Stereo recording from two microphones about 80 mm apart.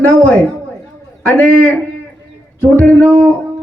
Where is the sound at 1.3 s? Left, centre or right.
Centre.